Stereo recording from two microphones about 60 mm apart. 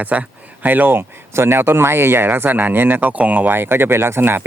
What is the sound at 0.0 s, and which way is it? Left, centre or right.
Speech, right.